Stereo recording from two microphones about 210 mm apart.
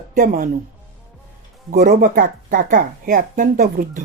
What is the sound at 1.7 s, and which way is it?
Speech, 40° right (ahead or behind).